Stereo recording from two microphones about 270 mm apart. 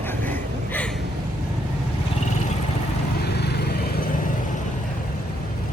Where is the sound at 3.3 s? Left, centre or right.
Left.